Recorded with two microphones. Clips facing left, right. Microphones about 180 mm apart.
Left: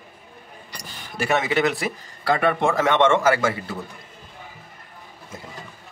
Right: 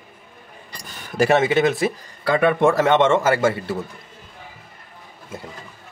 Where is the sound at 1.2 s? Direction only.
30° right (ahead or behind).